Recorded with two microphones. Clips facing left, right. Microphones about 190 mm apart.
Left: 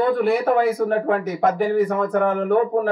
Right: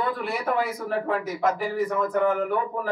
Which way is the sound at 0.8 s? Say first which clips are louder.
Left 7 dB; 55° left (ahead or behind).